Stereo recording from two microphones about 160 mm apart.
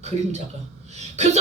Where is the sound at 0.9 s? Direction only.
45° right (ahead or behind).